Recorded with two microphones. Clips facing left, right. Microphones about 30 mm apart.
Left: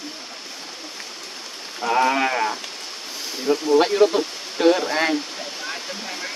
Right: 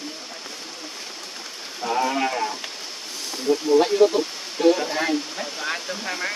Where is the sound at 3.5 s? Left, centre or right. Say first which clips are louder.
Even; left.